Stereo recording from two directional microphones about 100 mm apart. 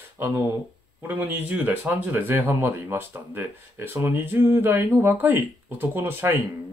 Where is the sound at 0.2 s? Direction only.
25° right (ahead or behind).